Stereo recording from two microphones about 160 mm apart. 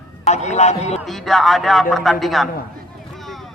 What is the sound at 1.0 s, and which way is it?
Speech, centre (ahead or behind).